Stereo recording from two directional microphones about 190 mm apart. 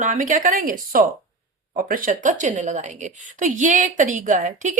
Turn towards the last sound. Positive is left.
turn(degrees=-40)  # may be behind; listen again after turning